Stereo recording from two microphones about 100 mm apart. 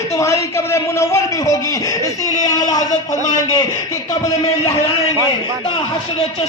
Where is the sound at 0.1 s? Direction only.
30° left (ahead or behind).